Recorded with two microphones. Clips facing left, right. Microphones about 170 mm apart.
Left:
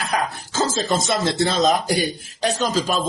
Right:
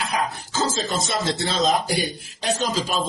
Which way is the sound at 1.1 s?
45° left (ahead or behind).